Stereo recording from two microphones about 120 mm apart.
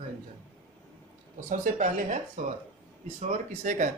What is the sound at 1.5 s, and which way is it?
Speech, 90° right.